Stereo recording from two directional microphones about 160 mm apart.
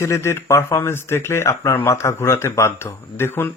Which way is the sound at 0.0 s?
15° left (ahead or behind).